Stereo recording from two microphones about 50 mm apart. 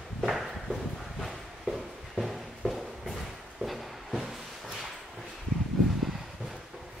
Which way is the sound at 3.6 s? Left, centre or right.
Centre.